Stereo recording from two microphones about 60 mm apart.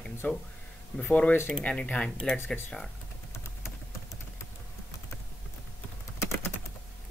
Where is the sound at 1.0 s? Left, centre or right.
Left.